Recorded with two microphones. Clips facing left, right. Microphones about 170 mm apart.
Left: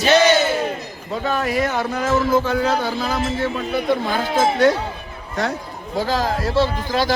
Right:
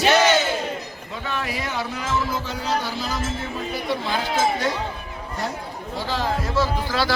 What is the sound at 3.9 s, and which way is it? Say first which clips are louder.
Speech: left 3 dB; 50° left (ahead or behind).